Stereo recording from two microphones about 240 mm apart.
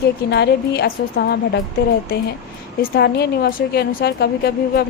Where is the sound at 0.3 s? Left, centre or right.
Left.